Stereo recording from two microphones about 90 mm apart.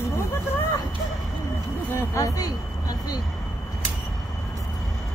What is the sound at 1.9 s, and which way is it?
Speech, 35° left (ahead or behind).